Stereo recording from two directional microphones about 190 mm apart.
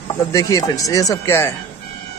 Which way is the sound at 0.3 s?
20° left (ahead or behind).